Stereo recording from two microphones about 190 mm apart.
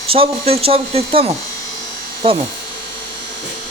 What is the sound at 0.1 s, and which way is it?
Speech, 30° right (ahead or behind).